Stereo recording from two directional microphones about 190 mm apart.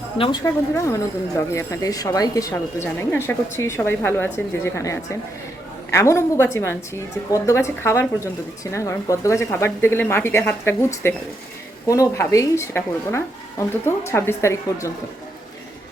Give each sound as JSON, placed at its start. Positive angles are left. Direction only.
{"t": 0.4, "sound": "speech", "side_deg": 15}